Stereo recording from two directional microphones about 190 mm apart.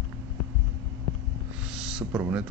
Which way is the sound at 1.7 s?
5° right (ahead or behind).